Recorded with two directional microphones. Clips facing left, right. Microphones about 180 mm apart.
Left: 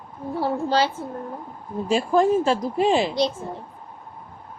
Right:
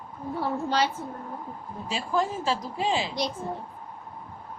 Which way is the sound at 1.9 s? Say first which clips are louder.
Left 9 dB; 50° left (ahead or behind).